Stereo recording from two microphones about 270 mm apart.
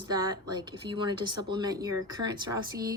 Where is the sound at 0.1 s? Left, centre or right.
Centre.